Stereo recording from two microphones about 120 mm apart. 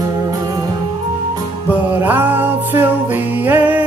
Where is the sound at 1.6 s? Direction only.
15° right (ahead or behind).